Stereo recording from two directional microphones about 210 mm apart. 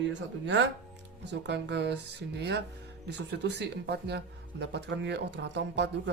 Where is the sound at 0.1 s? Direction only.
60° right (ahead or behind).